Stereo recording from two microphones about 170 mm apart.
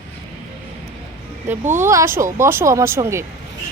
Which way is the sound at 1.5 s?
10° right (ahead or behind).